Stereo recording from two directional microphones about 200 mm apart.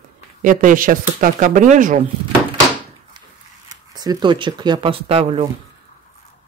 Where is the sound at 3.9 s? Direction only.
20° right (ahead or behind).